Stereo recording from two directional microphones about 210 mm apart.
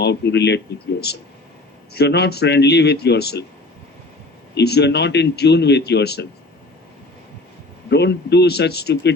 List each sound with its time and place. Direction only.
0.0 s speech: 55° left (ahead or behind)
1.9 s speech: 50° left (ahead or behind)
4.5 s speech: 50° left (ahead or behind)
7.9 s speech: 55° left (ahead or behind)